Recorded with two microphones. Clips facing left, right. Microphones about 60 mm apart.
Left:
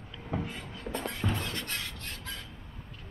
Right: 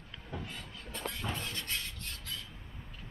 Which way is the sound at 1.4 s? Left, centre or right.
Left.